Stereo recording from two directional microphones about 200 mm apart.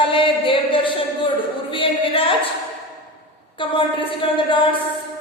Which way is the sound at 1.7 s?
25° left (ahead or behind).